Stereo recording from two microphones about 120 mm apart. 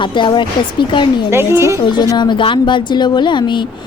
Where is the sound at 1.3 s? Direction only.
20° right (ahead or behind).